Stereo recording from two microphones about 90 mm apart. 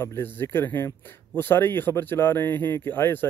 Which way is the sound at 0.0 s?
25° left (ahead or behind).